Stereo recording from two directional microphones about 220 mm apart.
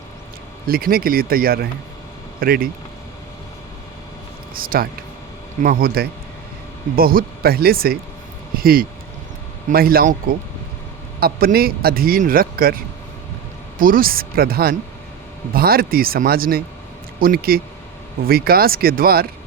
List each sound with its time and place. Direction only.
0.7 s a man's voice: 40° right (ahead or behind)
4.5 s a man's voice: 40° right (ahead or behind)